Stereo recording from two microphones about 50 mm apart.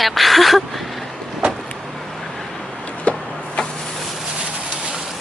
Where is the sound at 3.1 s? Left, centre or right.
Left.